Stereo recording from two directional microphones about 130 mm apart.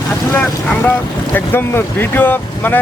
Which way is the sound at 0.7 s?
15° left (ahead or behind).